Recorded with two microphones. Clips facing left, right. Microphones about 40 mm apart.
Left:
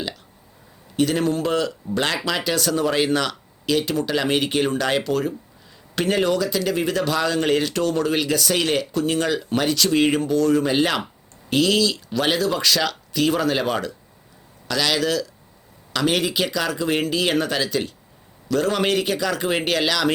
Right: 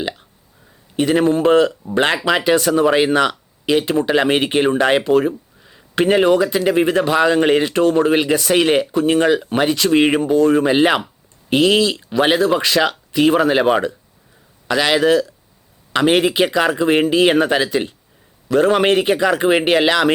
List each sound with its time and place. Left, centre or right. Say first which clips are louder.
0.9 s speech: right 5 dB; right